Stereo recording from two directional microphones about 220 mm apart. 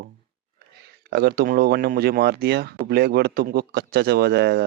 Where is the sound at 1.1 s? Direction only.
45° right (ahead or behind).